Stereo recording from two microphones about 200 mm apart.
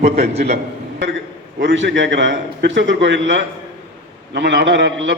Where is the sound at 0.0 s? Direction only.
35° right (ahead or behind).